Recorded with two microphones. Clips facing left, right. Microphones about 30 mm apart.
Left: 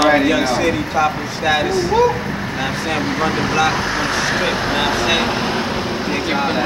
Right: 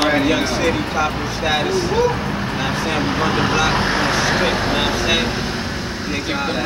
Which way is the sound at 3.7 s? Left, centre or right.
Right.